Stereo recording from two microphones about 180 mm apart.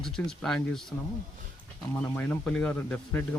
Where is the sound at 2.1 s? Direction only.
10° left (ahead or behind).